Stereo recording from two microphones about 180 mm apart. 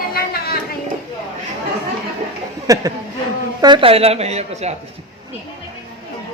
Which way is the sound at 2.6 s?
20° right (ahead or behind).